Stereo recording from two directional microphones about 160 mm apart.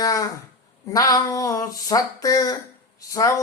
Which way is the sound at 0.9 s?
20° left (ahead or behind).